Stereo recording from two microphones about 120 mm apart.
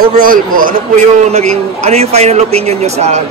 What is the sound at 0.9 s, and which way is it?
A man's voice, 65° right (ahead or behind).